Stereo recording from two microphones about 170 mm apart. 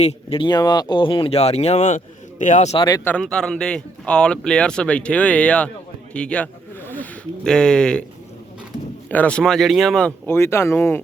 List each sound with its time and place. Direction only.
0.0 s speech: 35° left (ahead or behind)
2.7 s speech: 25° left (ahead or behind)
3.0 s speech: 10° left (ahead or behind)
6.1 s a sound: 5° left (ahead or behind)
9.0 s speech: 10° left (ahead or behind)
10.2 s speech: 15° left (ahead or behind)